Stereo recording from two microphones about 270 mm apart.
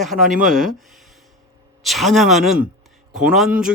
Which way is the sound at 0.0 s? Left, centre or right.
Centre.